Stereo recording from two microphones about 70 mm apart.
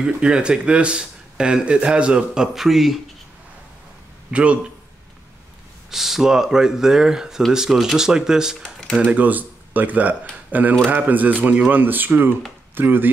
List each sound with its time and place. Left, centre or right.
0.0 s speech: centre
4.3 s a man's voice: centre
5.9 s speech: centre
9.0 s speech: right